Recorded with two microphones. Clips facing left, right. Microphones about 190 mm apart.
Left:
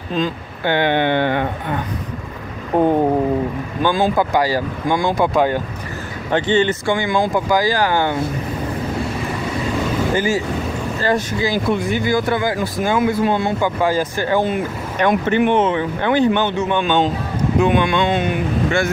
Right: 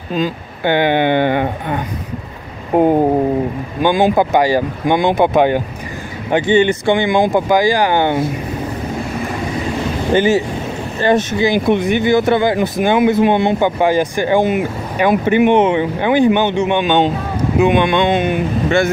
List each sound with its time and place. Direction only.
0.1 s speech: 10° right (ahead or behind)
10.1 s speech: 25° right (ahead or behind)